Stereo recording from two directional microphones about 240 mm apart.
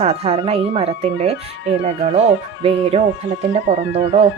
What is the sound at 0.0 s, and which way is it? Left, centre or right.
Speech, right.